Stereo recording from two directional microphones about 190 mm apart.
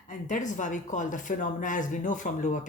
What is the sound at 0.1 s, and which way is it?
Speech, 40° left (ahead or behind).